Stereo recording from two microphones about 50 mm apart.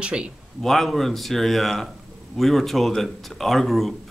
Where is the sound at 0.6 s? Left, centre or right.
Centre.